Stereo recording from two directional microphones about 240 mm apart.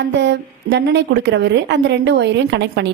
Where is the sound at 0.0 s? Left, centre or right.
Right.